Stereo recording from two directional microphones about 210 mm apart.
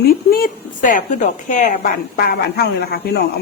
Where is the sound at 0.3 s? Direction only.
45° left (ahead or behind).